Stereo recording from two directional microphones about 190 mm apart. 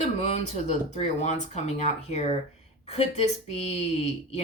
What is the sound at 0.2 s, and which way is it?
Speech, 35° left (ahead or behind).